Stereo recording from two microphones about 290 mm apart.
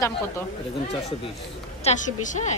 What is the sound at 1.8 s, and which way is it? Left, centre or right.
Speech, left.